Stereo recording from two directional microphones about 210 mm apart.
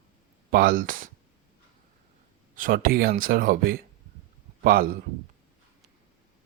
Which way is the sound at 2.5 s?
40° right (ahead or behind).